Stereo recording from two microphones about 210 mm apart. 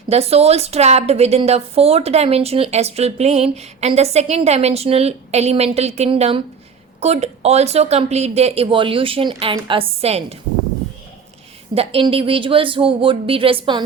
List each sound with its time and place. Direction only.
0.1 s a woman's voice: 30° right (ahead or behind)
11.7 s a woman's voice: 30° right (ahead or behind)